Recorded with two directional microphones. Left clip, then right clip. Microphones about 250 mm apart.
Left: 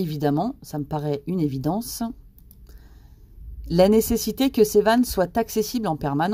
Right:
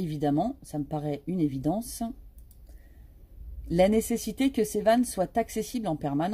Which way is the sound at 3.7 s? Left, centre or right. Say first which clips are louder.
Left 6 dB; left.